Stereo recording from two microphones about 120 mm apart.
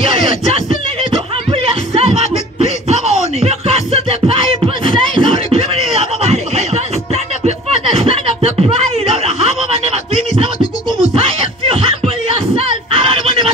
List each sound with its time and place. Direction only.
1.5 s music: 55° right (ahead or behind)
6.3 s chuckle: 65° right (ahead or behind)
7.4 s a sound: 55° right (ahead or behind)
10.6 s music: 30° left (ahead or behind)
12.3 s music: 50° right (ahead or behind)